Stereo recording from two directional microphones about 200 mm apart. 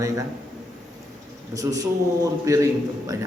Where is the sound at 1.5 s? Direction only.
15° right (ahead or behind).